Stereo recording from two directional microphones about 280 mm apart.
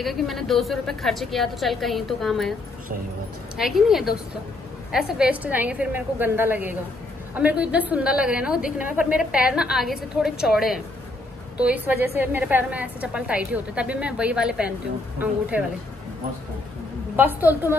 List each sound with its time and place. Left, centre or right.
0.0 s a woman's voice: centre
3.5 s a woman's voice: centre
17.2 s a woman's voice: centre